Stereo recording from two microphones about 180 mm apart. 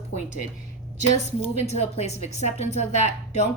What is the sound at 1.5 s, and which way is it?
A woman's voice, 35° left (ahead or behind).